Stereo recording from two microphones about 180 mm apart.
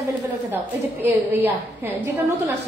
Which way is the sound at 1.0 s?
10° right (ahead or behind).